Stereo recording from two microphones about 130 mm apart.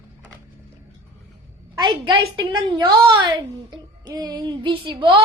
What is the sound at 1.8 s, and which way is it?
A woman's voice, 35° right (ahead or behind).